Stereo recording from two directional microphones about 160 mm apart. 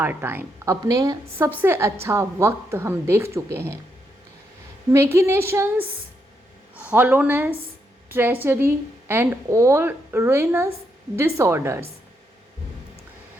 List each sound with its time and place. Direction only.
0.0 s a woman's voice: 15° right (ahead or behind)
5.1 s a woman's voice: 15° right (ahead or behind)